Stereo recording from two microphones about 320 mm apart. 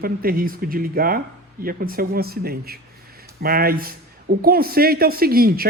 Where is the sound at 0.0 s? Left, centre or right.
Right.